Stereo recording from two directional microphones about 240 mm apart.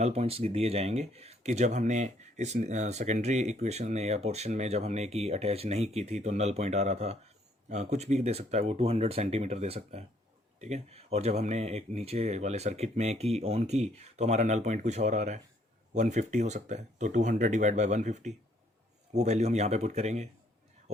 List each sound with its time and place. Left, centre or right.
0.0 s speech: right